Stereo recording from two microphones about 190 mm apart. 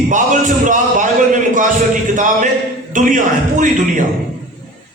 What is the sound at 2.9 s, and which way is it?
Speech, 45° right (ahead or behind).